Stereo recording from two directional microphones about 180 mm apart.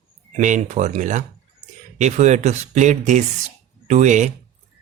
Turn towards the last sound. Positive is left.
turn(degrees=-40)  # may be behind; listen again after turning